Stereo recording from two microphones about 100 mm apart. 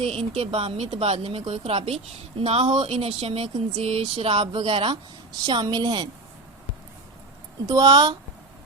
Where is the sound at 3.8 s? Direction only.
90° right.